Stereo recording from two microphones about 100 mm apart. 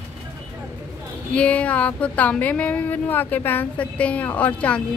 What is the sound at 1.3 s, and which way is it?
Speech, 15° left (ahead or behind).